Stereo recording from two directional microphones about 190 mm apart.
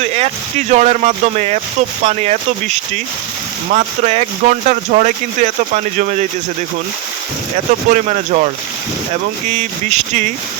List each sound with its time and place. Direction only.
0.0 s vehicle: 35° right (ahead or behind)
0.7 s speech: 40° right (ahead or behind)
3.7 s speech: 40° right (ahead or behind)
7.9 s speech: 40° right (ahead or behind)
9.9 s speech: 40° right (ahead or behind)